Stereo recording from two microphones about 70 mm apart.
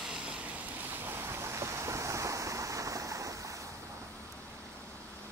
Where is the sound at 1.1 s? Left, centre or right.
Right.